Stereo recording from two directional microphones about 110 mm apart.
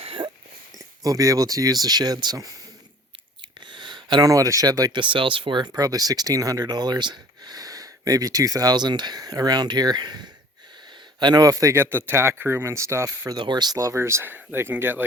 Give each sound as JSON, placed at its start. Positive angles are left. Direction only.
{"t": 0.0, "sound": "a sound", "side_deg": -55}
{"t": 1.0, "sound": "speech", "side_deg": -30}
{"t": 3.7, "sound": "speech", "side_deg": -45}
{"t": 4.9, "sound": "speech", "side_deg": -45}
{"t": 13.3, "sound": "speech", "side_deg": -45}